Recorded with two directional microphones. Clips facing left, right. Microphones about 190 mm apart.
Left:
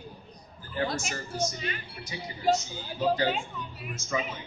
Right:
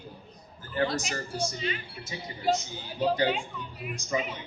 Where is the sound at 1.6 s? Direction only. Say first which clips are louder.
Right 3 dB; 50° left (ahead or behind).